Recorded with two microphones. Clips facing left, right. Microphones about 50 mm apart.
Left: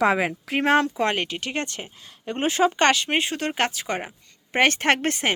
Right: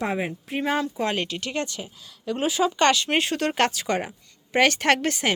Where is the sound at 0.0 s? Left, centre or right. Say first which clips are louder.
Left 6 dB; left.